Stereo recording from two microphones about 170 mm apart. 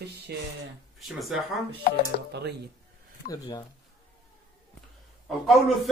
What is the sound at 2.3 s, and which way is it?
Speech, 75° right (ahead or behind).